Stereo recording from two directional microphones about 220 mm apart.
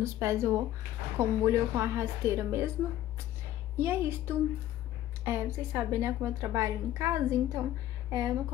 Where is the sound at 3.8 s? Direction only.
10° right (ahead or behind).